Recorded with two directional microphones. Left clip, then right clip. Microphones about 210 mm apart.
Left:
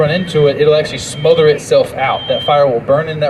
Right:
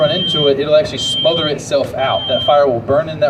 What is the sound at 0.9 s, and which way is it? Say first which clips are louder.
Speech: left 2 dB; 55° right (ahead or behind).